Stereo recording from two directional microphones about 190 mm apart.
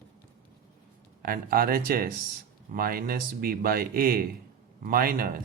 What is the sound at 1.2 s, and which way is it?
Speech, 50° right (ahead or behind).